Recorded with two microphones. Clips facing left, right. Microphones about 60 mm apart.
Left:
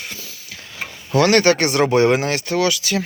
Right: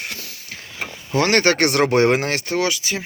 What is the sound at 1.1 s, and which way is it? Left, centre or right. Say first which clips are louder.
Speech: left 3 dB; right.